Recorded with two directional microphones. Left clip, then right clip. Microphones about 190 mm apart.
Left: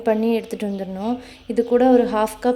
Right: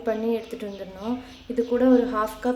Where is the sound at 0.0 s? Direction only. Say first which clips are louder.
Left 6 dB; 45° left (ahead or behind).